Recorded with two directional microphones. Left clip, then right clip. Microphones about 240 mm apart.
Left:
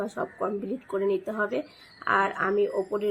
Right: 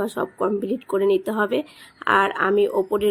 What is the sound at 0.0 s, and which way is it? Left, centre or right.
Speech, right.